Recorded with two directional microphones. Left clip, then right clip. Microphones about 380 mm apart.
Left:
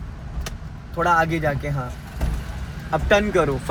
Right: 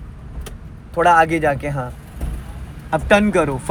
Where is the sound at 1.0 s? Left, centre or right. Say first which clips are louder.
Right 6 dB; right.